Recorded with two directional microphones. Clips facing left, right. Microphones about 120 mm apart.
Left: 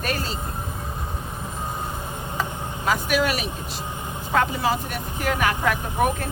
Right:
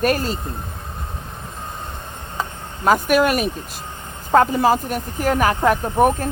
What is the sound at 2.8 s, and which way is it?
Speech, 50° right (ahead or behind).